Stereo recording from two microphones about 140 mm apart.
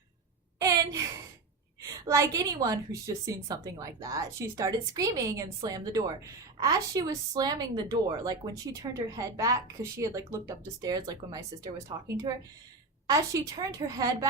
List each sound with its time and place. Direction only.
1.8 s a woman's voice: 25° right (ahead or behind)